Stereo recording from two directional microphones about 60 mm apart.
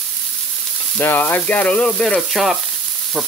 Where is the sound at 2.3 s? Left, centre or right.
Centre.